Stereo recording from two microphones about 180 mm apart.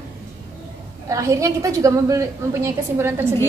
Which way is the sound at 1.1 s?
20° right (ahead or behind).